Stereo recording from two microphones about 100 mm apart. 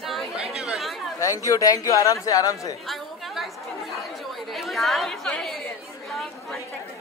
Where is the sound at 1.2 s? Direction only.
30° left (ahead or behind).